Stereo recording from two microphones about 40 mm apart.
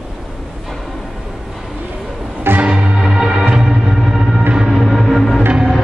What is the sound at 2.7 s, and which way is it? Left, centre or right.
Music, right.